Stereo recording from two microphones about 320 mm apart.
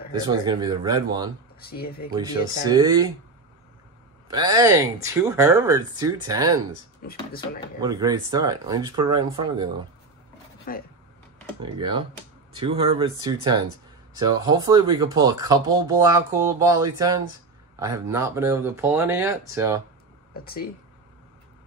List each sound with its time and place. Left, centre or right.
0.3 s speech: centre
1.6 s speech: left
2.6 s speech: centre
4.3 s speech: centre
7.0 s speech: left
7.8 s speech: centre
10.7 s speech: left
11.6 s speech: centre
20.3 s speech: left